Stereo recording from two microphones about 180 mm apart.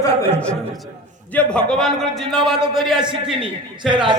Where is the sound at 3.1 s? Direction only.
30° right (ahead or behind).